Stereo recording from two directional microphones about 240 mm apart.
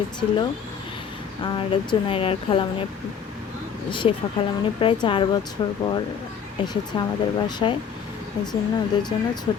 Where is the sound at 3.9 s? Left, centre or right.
Centre.